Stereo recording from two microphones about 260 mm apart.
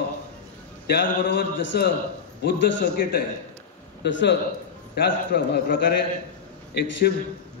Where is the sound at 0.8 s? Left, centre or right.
Left.